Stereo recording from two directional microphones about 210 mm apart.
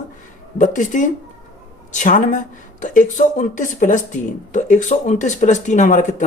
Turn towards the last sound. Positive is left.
turn(degrees=35)  # may be behind; listen again after turning